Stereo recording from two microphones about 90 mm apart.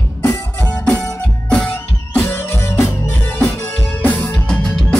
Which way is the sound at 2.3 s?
25° left (ahead or behind).